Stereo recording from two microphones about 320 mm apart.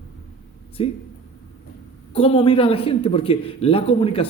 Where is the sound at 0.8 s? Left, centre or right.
Centre.